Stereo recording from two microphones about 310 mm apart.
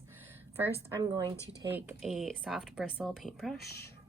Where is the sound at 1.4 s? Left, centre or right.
Centre.